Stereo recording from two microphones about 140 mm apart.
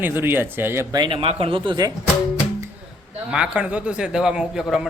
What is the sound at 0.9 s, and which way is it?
A man's voice, 35° right (ahead or behind).